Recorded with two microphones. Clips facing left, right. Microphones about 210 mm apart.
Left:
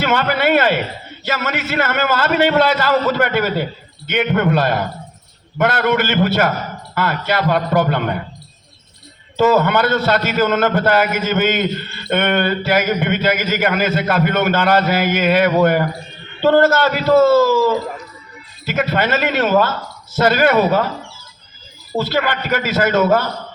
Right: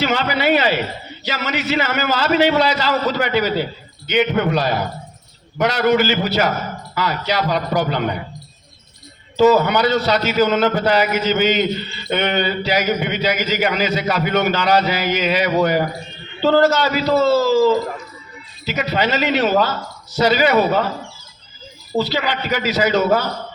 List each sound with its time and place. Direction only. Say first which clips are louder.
0.0 s a man's voice: left 2 dB; 55° left (ahead or behind)
9.4 s a man's voice: right 1 dB; 50° left (ahead or behind)
18.6 s a man's voice: left 2 dB; 50° left (ahead or behind)
21.9 s a man's voice: left 1 dB; 50° left (ahead or behind)